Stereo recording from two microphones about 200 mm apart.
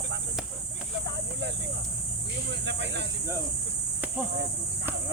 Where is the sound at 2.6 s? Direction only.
60° right (ahead or behind).